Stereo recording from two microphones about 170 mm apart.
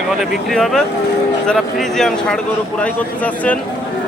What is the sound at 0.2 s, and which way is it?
Speech, centre (ahead or behind).